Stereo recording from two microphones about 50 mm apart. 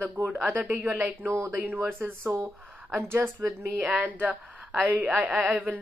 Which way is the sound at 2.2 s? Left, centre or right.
Right.